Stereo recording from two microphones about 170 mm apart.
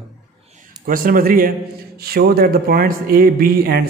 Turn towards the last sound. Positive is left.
turn(degrees=-65)  # may be behind; listen again after turning